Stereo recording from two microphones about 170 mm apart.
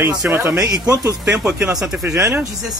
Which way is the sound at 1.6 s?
5° right (ahead or behind).